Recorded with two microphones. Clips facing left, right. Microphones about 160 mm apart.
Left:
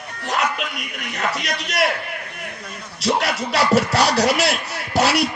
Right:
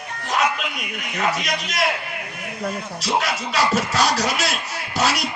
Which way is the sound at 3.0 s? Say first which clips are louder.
Left 4 dB; 65° left (ahead or behind).